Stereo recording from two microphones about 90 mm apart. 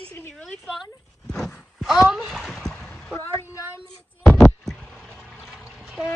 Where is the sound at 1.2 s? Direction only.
5° left (ahead or behind).